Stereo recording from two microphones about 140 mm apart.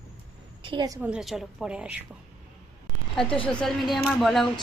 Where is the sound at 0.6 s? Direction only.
35° right (ahead or behind).